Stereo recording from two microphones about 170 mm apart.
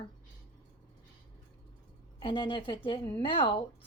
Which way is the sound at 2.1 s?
30° left (ahead or behind).